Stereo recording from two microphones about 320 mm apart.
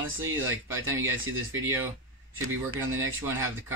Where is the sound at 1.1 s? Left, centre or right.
Right.